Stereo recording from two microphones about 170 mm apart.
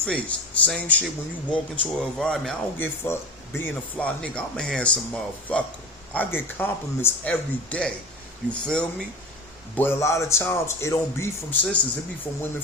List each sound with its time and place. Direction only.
0.0 s speech: 5° left (ahead or behind)